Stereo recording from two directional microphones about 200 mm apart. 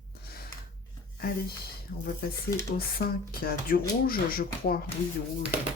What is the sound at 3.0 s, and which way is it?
Speech, 50° left (ahead or behind).